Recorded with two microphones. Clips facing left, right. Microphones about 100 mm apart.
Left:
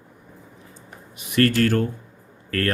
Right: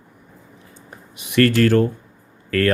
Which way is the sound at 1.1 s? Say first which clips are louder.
Right 3 dB; 90° right.